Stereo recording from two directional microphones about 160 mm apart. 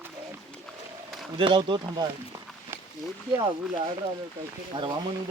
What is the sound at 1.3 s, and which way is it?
Speech, 30° right (ahead or behind).